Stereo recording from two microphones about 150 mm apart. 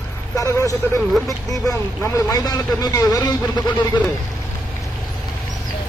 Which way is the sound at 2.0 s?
25° left (ahead or behind).